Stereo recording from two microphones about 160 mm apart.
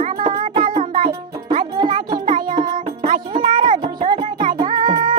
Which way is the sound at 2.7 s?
55° right (ahead or behind).